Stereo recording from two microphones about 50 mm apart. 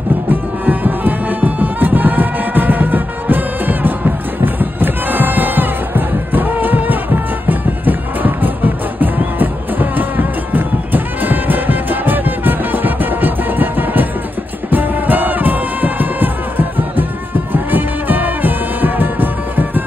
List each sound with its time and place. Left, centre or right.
0.3 s music: right